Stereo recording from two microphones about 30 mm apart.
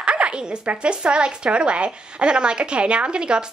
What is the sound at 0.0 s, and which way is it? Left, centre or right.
A woman's voice, right.